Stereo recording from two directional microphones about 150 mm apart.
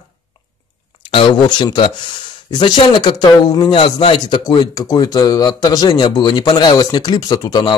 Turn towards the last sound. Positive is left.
turn(degrees=25)  # may be behind; listen again after turning